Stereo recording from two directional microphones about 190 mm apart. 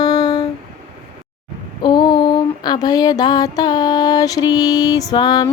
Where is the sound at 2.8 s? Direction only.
20° left (ahead or behind).